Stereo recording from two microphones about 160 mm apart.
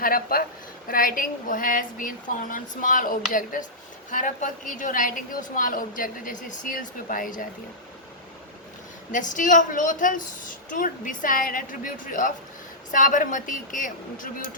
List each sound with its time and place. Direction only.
0.0 s a woman's voice: 65° left (ahead or behind)
9.3 s a woman's voice: 55° left (ahead or behind)